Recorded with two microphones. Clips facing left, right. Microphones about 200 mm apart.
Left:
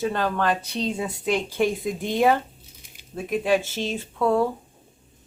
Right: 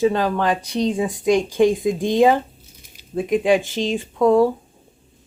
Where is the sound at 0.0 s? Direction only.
15° right (ahead or behind).